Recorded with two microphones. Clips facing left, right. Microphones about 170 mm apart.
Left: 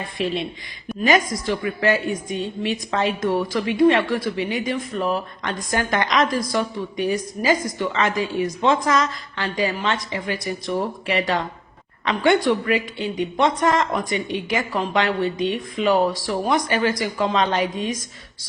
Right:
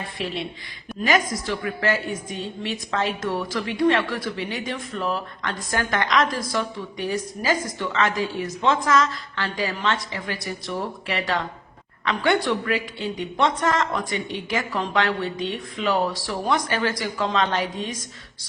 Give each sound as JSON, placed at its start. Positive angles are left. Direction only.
{"t": 0.2, "sound": "a woman's voice", "side_deg": 20}